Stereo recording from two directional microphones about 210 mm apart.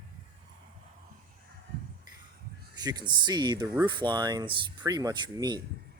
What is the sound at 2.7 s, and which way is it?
Speech, 20° right (ahead or behind).